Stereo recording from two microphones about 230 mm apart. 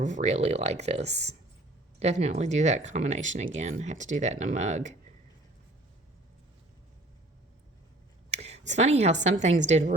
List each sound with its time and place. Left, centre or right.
0.0 s speech: right
8.3 s a woman's voice: right